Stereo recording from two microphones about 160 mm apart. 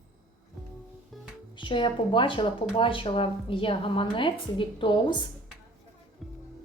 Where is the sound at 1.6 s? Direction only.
30° left (ahead or behind).